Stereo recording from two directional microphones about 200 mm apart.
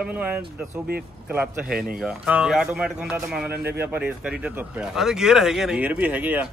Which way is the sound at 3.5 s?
55° right (ahead or behind).